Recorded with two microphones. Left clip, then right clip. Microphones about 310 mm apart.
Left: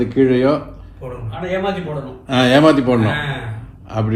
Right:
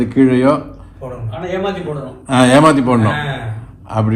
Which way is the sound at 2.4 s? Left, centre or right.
Centre.